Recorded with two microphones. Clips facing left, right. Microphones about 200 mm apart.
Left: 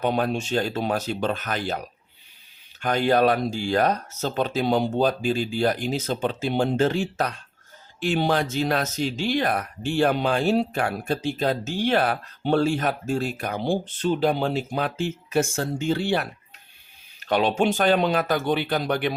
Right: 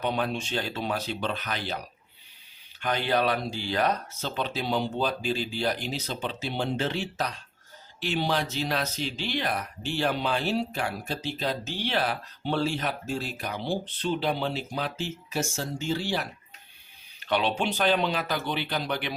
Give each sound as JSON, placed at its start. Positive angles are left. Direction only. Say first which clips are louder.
{"t": 0.0, "sound": "speech", "louder": "left 5 dB", "side_deg": 45}
{"t": 2.8, "sound": "speech", "louder": "left 6 dB", "side_deg": 45}
{"t": 17.2, "sound": "a sound", "louder": "left 4 dB", "side_deg": 45}
{"t": 17.6, "sound": "speech", "louder": "left 5 dB", "side_deg": 50}